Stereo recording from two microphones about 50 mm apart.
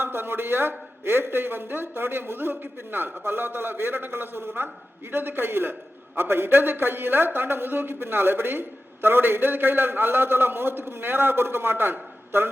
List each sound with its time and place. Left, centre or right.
0.0 s a man's voice: right